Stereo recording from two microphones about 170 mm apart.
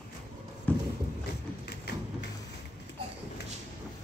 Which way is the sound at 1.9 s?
75° left (ahead or behind).